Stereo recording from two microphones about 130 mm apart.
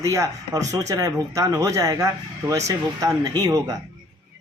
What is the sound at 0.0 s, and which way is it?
Speech, 25° right (ahead or behind).